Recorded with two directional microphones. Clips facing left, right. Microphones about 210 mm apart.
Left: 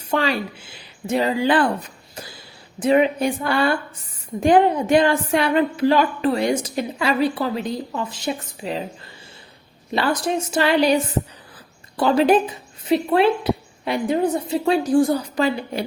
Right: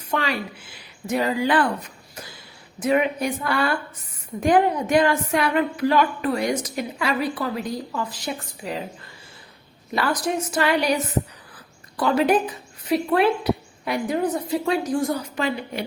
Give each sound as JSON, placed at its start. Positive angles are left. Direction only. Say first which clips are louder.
{"t": 0.1, "sound": "a woman's voice", "louder": "left 4 dB", "side_deg": 30}
{"t": 2.8, "sound": "a woman's voice", "louder": "left 4 dB", "side_deg": 30}
{"t": 9.9, "sound": "a woman's voice", "louder": "left 2 dB", "side_deg": 25}